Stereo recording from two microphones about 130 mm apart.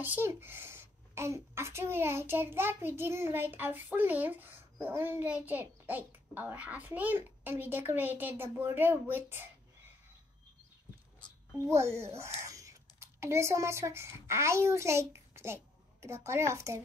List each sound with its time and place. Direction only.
0.0 s a woman's voice: 15° right (ahead or behind)
11.5 s speech: 20° right (ahead or behind)